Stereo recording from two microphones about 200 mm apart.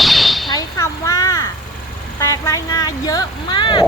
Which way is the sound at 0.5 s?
15° left (ahead or behind).